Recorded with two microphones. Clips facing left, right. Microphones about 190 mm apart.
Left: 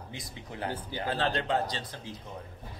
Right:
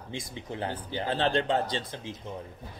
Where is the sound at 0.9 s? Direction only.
20° right (ahead or behind).